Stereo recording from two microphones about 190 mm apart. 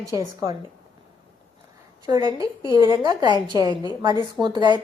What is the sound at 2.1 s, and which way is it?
A woman's voice, 20° right (ahead or behind).